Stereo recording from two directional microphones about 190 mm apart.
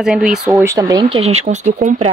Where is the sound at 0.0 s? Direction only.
5° right (ahead or behind).